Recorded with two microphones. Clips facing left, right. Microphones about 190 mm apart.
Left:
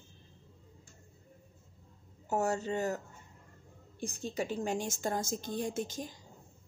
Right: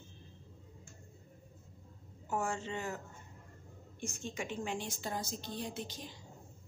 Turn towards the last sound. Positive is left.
turn(degrees=45)  # may be behind; listen again after turning